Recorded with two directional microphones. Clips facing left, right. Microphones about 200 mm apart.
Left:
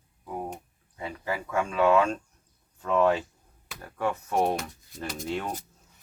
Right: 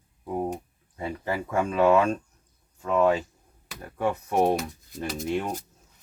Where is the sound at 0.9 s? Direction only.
25° right (ahead or behind).